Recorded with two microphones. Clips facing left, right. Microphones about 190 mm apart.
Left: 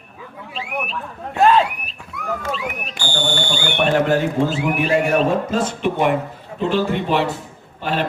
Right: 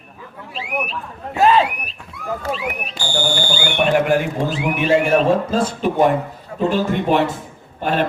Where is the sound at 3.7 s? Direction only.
15° right (ahead or behind).